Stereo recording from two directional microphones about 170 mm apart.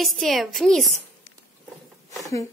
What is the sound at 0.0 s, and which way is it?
A woman's voice, centre (ahead or behind).